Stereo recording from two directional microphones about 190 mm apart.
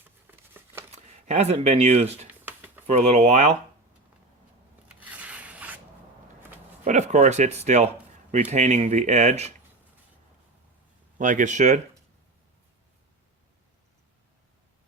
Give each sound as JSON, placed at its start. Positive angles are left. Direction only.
{"t": 0.0, "sound": "a sound", "side_deg": -10}
{"t": 1.3, "sound": "speech", "side_deg": -35}
{"t": 2.4, "sound": "a sound", "side_deg": -10}
{"t": 2.8, "sound": "speech", "side_deg": -35}
{"t": 4.9, "sound": "rub", "side_deg": -5}
{"t": 6.8, "sound": "speech", "side_deg": -40}
{"t": 11.2, "sound": "speech", "side_deg": -40}